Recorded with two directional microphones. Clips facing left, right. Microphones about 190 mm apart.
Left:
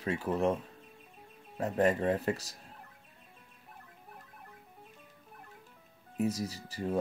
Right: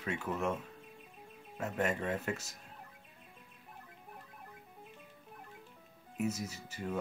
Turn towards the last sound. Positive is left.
turn(degrees=35)  # may be behind; listen again after turning